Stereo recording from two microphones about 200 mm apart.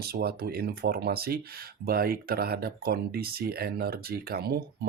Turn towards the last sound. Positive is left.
turn(degrees=-50)  # may be behind; listen again after turning